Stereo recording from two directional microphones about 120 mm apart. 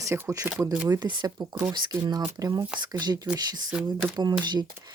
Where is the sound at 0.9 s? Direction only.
35° right (ahead or behind).